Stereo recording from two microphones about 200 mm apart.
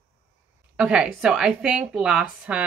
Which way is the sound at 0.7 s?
5° right (ahead or behind).